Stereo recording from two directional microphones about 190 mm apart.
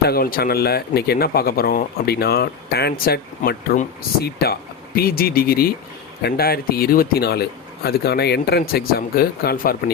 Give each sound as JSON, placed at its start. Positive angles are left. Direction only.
{"t": 0.0, "sound": "speech", "side_deg": 50}